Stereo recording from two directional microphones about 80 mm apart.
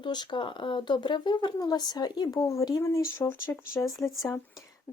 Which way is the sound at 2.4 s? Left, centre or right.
Left.